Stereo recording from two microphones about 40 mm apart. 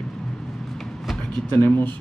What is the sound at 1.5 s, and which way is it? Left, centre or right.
Speech, left.